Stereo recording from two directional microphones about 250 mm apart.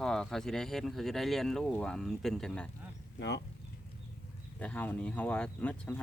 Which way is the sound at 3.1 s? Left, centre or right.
Left.